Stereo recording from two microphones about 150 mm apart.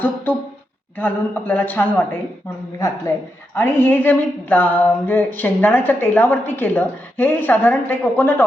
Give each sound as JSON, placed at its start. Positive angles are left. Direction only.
{"t": 0.9, "sound": "a woman's voice", "side_deg": 10}